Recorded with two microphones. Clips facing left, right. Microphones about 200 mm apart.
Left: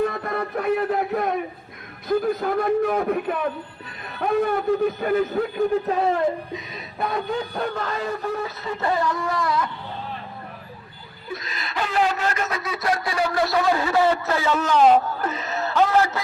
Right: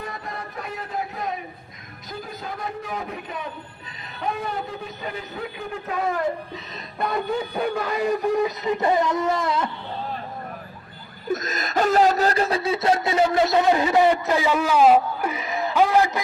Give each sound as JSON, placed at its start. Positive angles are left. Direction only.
{"t": 0.0, "sound": "music", "side_deg": 60}
{"t": 2.0, "sound": "a man's voice", "side_deg": 60}
{"t": 4.9, "sound": "a man's voice", "side_deg": 50}
{"t": 5.9, "sound": "speech", "side_deg": 30}
{"t": 7.0, "sound": "a man's voice", "side_deg": 0}
{"t": 11.3, "sound": "speech", "side_deg": -45}